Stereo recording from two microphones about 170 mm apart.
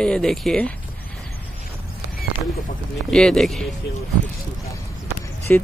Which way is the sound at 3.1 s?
5° left (ahead or behind).